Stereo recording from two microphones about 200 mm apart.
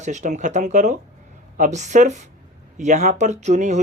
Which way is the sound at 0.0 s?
35° right (ahead or behind).